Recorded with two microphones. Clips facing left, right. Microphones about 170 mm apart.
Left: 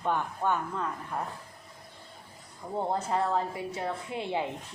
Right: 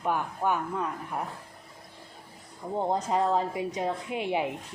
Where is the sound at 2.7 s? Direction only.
15° right (ahead or behind).